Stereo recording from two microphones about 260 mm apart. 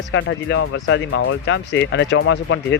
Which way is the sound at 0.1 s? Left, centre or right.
Left.